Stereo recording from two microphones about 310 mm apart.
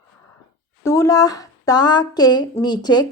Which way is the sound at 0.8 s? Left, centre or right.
Centre.